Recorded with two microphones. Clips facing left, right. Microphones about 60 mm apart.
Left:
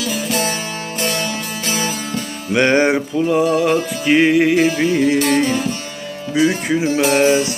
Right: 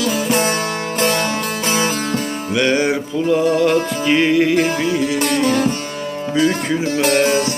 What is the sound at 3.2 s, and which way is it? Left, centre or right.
Music, centre.